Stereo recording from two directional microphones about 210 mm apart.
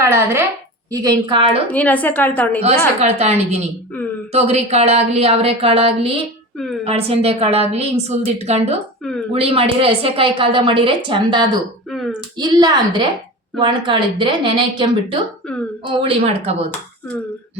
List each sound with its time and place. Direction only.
0.9 s speech: 20° right (ahead or behind)
1.7 s a woman's voice: 5° left (ahead or behind)
2.6 s a woman's voice: 30° right (ahead or behind)
11.9 s speech: centre (ahead or behind)
12.4 s speech: 20° right (ahead or behind)